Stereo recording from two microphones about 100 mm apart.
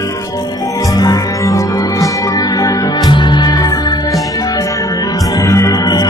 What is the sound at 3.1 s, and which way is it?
Music, 50° left (ahead or behind).